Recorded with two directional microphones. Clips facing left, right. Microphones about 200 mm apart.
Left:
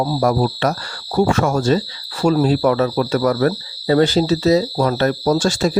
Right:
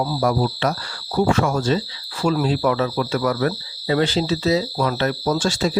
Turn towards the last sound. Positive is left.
turn(degrees=45)  # may be behind; listen again after turning